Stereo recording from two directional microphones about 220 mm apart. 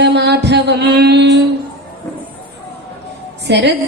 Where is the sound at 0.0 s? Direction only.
50° right (ahead or behind).